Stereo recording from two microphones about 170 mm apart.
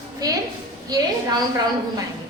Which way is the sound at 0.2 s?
20° right (ahead or behind).